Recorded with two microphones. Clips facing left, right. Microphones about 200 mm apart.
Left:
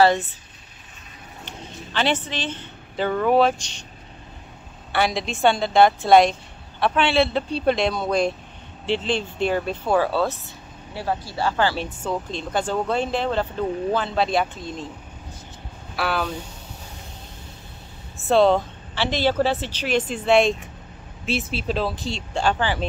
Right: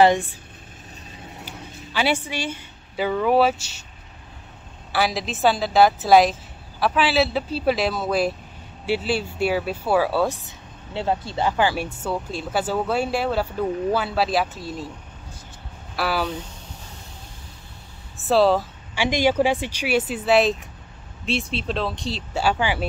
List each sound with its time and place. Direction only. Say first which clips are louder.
0.0 s speech: right 1 dB; 15° right (ahead or behind)
1.4 s speech: left 4 dB; 10° right (ahead or behind)
4.9 s speech: left 1 dB; centre (ahead or behind)
16.0 s speech: right 1 dB; 5° right (ahead or behind)
18.2 s speech: left 1 dB; 5° right (ahead or behind)